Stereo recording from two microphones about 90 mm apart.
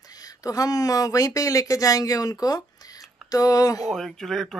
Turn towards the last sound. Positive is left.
turn(degrees=5)  # may be behind; listen again after turning